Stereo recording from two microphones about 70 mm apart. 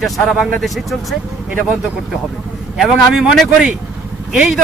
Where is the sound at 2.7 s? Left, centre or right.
Centre.